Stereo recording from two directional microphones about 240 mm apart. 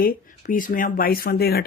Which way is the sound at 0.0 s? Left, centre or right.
Left.